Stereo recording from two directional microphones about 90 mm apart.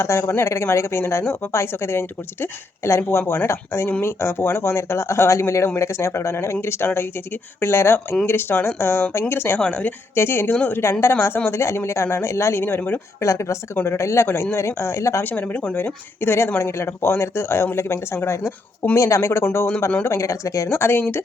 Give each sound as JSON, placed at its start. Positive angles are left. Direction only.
{"t": 0.0, "sound": "speech", "side_deg": 30}
{"t": 9.6, "sound": "speech", "side_deg": 10}
{"t": 10.2, "sound": "speech", "side_deg": 25}
{"t": 13.2, "sound": "speech", "side_deg": 35}
{"t": 15.2, "sound": "speech", "side_deg": 20}